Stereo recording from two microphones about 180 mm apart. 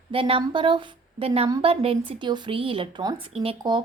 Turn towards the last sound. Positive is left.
turn(degrees=-25)  # may be behind; listen again after turning